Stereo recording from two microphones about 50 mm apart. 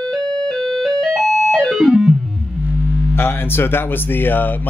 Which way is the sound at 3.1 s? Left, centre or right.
Left.